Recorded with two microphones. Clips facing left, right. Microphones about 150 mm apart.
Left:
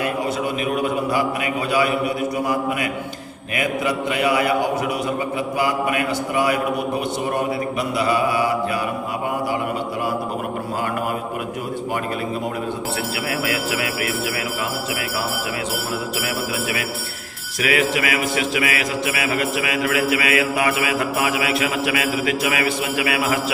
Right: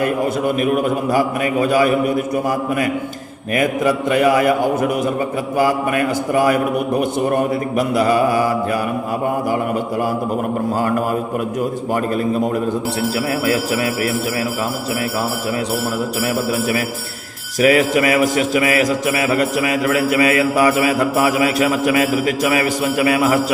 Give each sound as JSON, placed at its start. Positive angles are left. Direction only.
{"t": 0.0, "sound": "a man's voice", "side_deg": -50}
{"t": 3.5, "sound": "a man's voice", "side_deg": -45}
{"t": 7.8, "sound": "a man's voice", "side_deg": -45}
{"t": 17.7, "sound": "mantra", "side_deg": -40}